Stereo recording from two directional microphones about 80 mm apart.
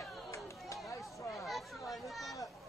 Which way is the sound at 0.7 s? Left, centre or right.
Left.